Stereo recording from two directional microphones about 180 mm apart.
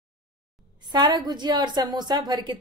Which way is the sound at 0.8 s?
25° right (ahead or behind).